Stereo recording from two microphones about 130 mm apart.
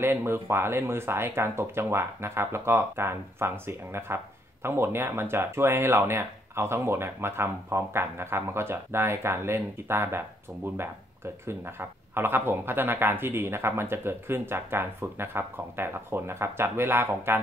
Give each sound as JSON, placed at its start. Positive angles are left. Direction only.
{"t": 0.0, "sound": "speech", "side_deg": -15}